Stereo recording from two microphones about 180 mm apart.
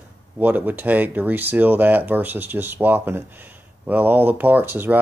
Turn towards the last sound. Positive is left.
turn(degrees=-10)  # may be behind; listen again after turning